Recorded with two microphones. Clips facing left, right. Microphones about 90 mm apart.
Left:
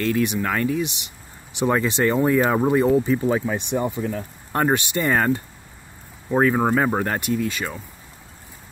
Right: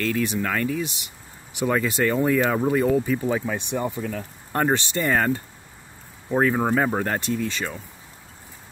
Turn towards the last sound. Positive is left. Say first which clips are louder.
# left 2 dB
turn(degrees=10)  # may be behind; listen again after turning